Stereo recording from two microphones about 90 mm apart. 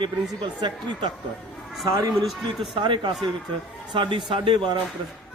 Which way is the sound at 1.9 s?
40° right (ahead or behind).